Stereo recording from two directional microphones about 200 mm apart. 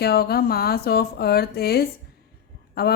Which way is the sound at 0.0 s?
50° left (ahead or behind).